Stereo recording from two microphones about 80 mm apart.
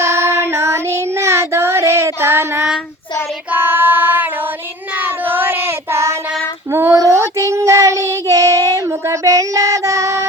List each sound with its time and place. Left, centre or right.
0.0 s child singing: right
3.5 s female singing: right
4.9 s child singing: right
6.7 s a sound: right
6.9 s child singing: right